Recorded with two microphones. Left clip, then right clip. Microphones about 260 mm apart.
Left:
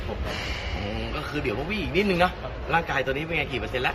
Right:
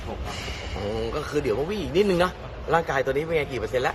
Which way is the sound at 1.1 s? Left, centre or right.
Right.